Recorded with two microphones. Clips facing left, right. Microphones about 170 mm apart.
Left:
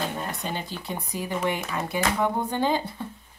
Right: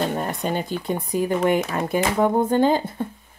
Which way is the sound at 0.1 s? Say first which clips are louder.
Right 7 dB; 50° right (ahead or behind).